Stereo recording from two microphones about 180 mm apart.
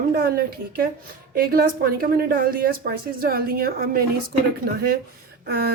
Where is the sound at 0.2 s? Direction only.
55° right (ahead or behind).